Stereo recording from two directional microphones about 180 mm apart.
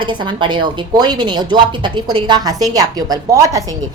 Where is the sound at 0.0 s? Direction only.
25° right (ahead or behind).